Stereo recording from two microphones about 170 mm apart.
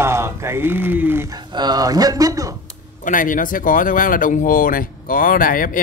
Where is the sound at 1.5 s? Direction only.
25° right (ahead or behind).